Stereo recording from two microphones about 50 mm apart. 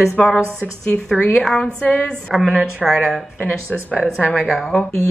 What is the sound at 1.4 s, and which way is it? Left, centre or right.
Speech, centre.